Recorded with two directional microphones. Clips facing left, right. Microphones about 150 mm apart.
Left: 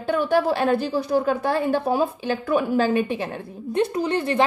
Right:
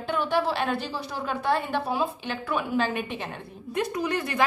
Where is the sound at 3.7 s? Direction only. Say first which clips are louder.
Left 5 dB; 30° left (ahead or behind).